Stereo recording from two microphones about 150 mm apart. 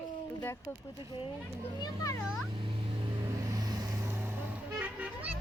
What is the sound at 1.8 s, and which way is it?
Speech, 20° left (ahead or behind).